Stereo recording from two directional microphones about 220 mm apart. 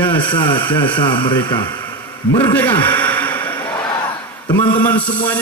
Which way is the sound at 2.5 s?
10° left (ahead or behind).